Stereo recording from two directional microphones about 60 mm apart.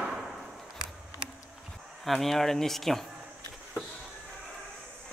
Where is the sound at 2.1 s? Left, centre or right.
Centre.